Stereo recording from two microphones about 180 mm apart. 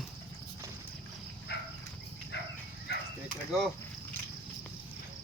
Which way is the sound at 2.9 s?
70° left (ahead or behind).